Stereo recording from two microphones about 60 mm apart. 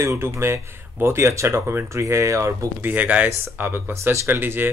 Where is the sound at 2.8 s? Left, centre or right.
Right.